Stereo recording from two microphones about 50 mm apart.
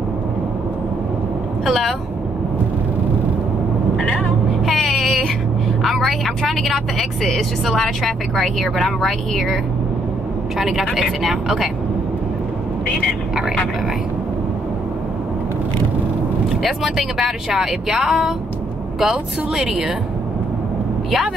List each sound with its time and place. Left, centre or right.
1.7 s speech: centre
4.0 s vehicle: left
4.6 s vehicle: centre
5.9 s speech: centre
11.0 s speech: centre
16.4 s a woman's voice: centre